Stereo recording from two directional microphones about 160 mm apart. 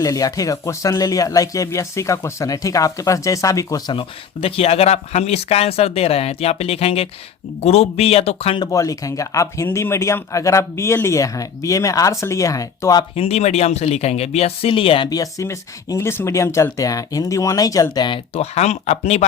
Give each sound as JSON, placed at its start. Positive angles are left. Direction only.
{"t": 0.0, "sound": "speech", "side_deg": 20}
{"t": 8.6, "sound": "speech", "side_deg": 20}
{"t": 13.1, "sound": "speech", "side_deg": 40}
{"t": 18.3, "sound": "speech", "side_deg": 45}